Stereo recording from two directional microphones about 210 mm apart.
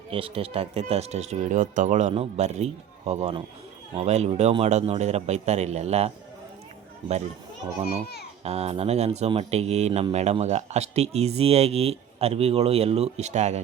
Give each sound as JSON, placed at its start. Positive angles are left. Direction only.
{"t": 0.1, "sound": "speech", "side_deg": -25}
{"t": 8.4, "sound": "speech", "side_deg": -30}